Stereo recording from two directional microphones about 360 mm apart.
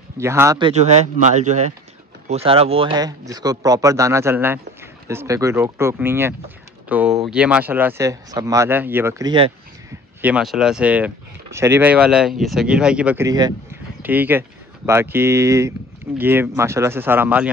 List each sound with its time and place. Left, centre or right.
0.2 s a man's voice: centre